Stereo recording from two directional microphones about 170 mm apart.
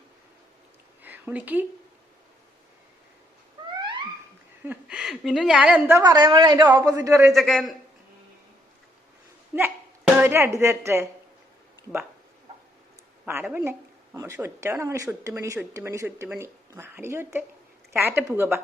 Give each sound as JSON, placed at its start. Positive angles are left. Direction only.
{"t": 1.0, "sound": "speech", "side_deg": -10}
{"t": 3.8, "sound": "a sound", "side_deg": -30}
{"t": 4.6, "sound": "a woman's voice", "side_deg": -10}
{"t": 6.0, "sound": "a woman's voice", "side_deg": -25}
{"t": 7.3, "sound": "a man's voice", "side_deg": 0}
{"t": 9.5, "sound": "a woman's voice", "side_deg": -15}
{"t": 13.2, "sound": "a woman's voice", "side_deg": -10}